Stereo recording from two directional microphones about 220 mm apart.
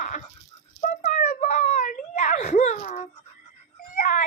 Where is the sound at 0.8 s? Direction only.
35° left (ahead or behind).